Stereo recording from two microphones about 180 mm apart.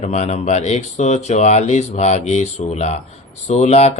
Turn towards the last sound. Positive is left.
turn(degrees=35)  # may be behind; listen again after turning